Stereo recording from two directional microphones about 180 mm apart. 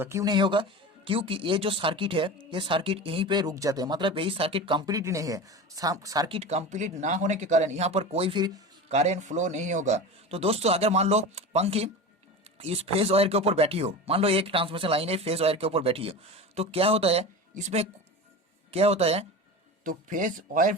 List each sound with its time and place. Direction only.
0.0 s speech: 15° right (ahead or behind)
8.9 s speech: 40° right (ahead or behind)
19.8 s speech: 45° right (ahead or behind)